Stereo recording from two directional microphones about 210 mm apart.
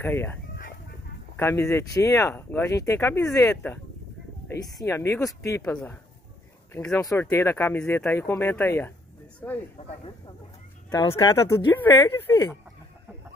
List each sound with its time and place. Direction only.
0.0 s speech: 10° left (ahead or behind)
6.7 s speech: 10° left (ahead or behind)
9.8 s speech: 25° left (ahead or behind)